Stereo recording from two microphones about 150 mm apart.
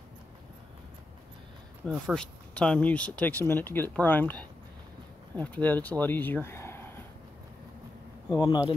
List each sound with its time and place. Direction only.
1.9 s speech: 5° left (ahead or behind)
8.3 s speech: 30° left (ahead or behind)